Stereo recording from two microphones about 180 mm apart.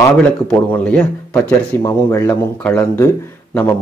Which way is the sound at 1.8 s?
20° left (ahead or behind).